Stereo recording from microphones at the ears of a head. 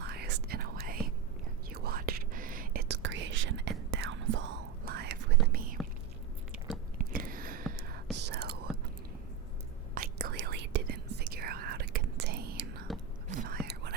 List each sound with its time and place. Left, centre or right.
0.0 s whispering: right
7.0 s a sound: right
8.1 s whispering: right
9.9 s whispering: right